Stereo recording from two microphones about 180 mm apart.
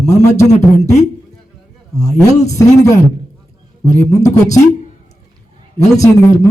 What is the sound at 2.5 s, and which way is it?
Speech, 20° left (ahead or behind).